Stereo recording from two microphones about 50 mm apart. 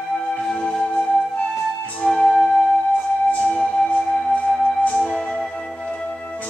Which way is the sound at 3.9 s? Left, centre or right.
Centre.